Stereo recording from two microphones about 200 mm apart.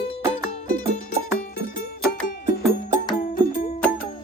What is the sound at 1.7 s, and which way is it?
Music, 45° left (ahead or behind).